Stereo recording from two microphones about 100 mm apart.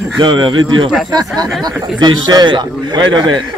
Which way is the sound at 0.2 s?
50° right (ahead or behind).